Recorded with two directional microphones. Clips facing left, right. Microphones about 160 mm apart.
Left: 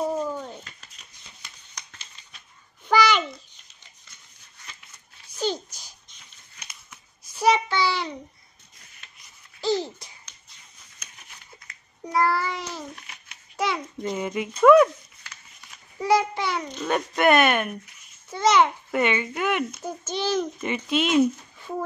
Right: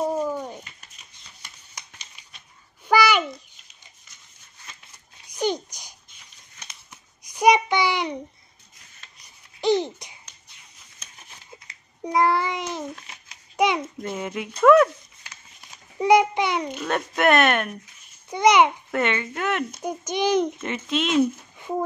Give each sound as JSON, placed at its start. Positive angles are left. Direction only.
{"t": 0.2, "sound": "a sound", "side_deg": -15}
{"t": 1.8, "sound": "a sound", "side_deg": -15}
{"t": 5.3, "sound": "babbling", "side_deg": -15}
{"t": 7.2, "sound": "child singing", "side_deg": -15}
{"t": 9.6, "sound": "babbling", "side_deg": -20}
{"t": 14.0, "sound": "speech", "side_deg": 0}
{"t": 16.0, "sound": "a child's voice", "side_deg": -20}
{"t": 16.8, "sound": "speech", "side_deg": 0}
{"t": 18.3, "sound": "a child's voice", "side_deg": -15}
{"t": 18.9, "sound": "speech", "side_deg": 5}
{"t": 19.8, "sound": "a child's voice", "side_deg": -15}
{"t": 20.6, "sound": "speech", "side_deg": 0}